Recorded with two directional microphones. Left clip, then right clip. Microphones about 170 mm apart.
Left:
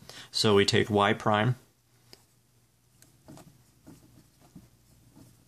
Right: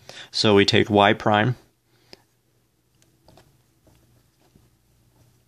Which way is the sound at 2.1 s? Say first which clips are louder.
Right 7 dB; 35° right (ahead or behind).